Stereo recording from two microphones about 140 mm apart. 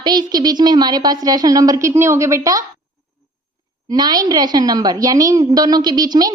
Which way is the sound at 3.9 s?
30° right (ahead or behind).